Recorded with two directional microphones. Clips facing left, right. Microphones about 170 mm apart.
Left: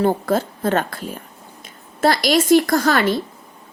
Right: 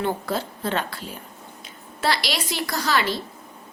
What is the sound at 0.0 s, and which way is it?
A woman's voice, 50° left (ahead or behind).